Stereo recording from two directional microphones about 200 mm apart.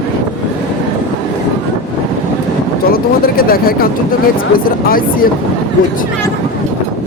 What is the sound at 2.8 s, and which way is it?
Speech, 50° left (ahead or behind).